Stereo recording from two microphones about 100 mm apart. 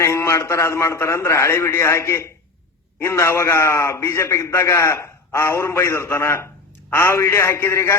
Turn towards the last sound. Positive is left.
turn(degrees=25)  # may be behind; listen again after turning